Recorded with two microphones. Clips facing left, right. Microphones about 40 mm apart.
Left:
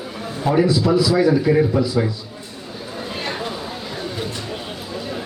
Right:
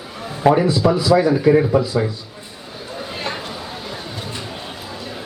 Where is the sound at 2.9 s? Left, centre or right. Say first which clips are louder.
Right 1 dB; centre.